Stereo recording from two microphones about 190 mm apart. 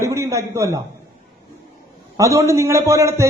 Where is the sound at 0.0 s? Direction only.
15° right (ahead or behind).